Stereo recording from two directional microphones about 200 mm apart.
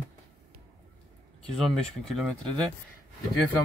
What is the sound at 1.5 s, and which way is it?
Speech, centre (ahead or behind).